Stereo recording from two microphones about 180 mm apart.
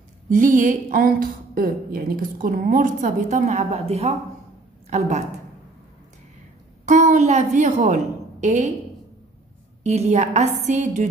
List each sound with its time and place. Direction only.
0.3 s a woman's voice: 45° right (ahead or behind)
6.9 s a woman's voice: 40° right (ahead or behind)
9.8 s a woman's voice: 40° right (ahead or behind)